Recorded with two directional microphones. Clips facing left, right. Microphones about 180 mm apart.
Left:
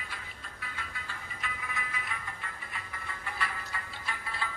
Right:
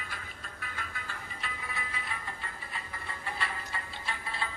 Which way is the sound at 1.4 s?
30° right (ahead or behind).